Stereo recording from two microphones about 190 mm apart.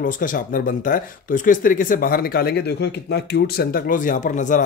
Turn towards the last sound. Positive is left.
turn(degrees=40)  # may be behind; listen again after turning